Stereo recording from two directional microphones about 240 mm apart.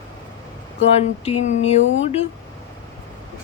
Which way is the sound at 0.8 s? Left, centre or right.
Left.